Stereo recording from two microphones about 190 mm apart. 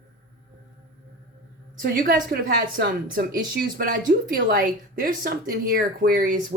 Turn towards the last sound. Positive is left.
turn(degrees=-45)  # may be behind; listen again after turning